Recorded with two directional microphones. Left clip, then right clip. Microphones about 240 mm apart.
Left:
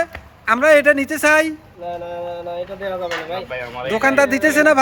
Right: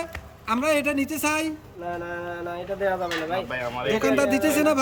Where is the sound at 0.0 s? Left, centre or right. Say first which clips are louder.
Left 11 dB; centre.